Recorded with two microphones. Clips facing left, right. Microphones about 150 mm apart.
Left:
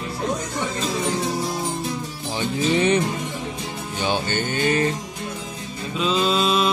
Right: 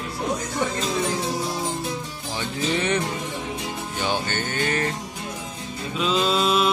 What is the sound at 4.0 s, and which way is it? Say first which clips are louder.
Music: left 3 dB; 20° left (ahead or behind).